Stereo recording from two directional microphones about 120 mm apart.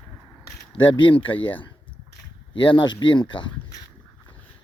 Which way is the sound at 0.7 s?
45° left (ahead or behind).